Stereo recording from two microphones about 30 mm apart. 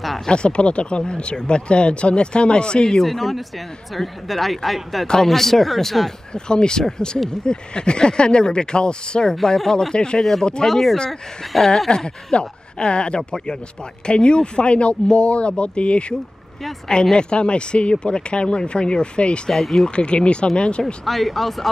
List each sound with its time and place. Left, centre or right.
0.3 s speech: left
3.0 s speech: centre
6.3 s speech: left
9.9 s speech: left
10.7 s speech: centre
12.4 s speech: left
19.5 s speech: centre
19.9 s speech: left
20.8 s speech: centre